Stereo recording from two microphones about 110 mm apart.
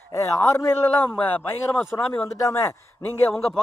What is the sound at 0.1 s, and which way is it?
A man's voice, 25° left (ahead or behind).